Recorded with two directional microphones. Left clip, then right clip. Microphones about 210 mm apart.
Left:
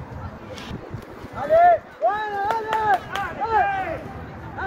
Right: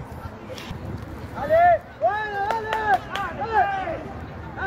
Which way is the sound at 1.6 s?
10° right (ahead or behind).